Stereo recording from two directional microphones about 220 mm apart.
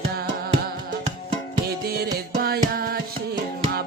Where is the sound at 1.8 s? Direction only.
45° right (ahead or behind).